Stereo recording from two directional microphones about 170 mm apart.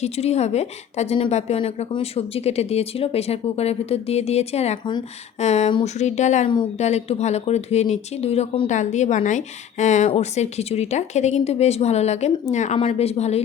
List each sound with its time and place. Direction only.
0.0 s speech: 40° left (ahead or behind)
5.4 s a sound: 40° left (ahead or behind)
5.8 s speech: 45° left (ahead or behind)